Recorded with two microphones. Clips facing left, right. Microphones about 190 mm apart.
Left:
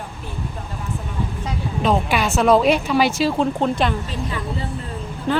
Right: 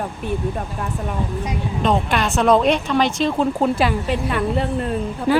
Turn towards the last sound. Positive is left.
turn(degrees=-10)  # may be behind; listen again after turning